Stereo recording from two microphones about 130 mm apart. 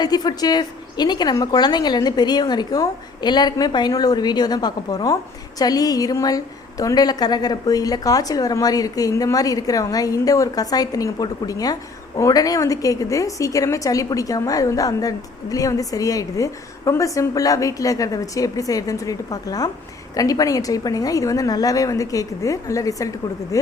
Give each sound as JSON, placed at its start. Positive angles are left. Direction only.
{"t": 0.0, "sound": "a woman's voice", "side_deg": 30}